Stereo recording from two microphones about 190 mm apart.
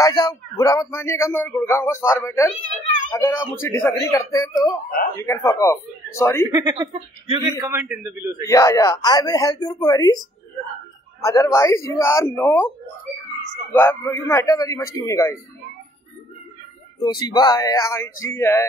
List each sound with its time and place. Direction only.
0.0 s a man's voice: 20° left (ahead or behind)
6.4 s a man's voice: 20° right (ahead or behind)
8.5 s a man's voice: 15° left (ahead or behind)
13.7 s a man's voice: 10° left (ahead or behind)
17.0 s a man's voice: 20° left (ahead or behind)